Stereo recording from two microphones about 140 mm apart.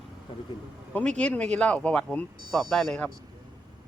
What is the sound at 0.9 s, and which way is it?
Speech, 5° left (ahead or behind).